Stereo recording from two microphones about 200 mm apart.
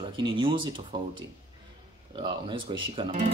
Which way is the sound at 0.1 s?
25° right (ahead or behind).